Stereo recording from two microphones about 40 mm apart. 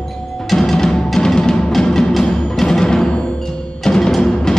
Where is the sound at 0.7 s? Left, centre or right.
Centre.